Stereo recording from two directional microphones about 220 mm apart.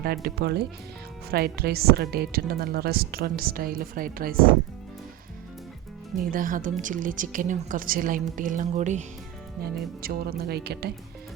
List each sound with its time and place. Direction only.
0.0 s speech: 45° right (ahead or behind)
6.3 s a woman's voice: 35° right (ahead or behind)
10.0 s speech: 45° right (ahead or behind)